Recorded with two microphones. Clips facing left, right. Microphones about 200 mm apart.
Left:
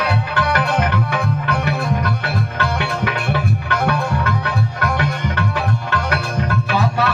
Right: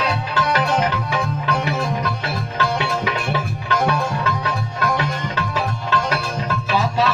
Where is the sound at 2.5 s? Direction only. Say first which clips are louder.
Even; 55° left (ahead or behind).